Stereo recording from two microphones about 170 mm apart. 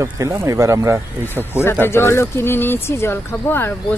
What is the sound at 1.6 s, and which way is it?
Speech, 15° left (ahead or behind).